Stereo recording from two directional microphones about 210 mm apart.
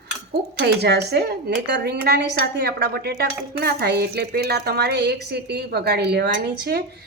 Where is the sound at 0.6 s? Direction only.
50° right (ahead or behind).